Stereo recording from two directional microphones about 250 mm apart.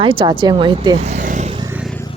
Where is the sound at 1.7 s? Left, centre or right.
Centre.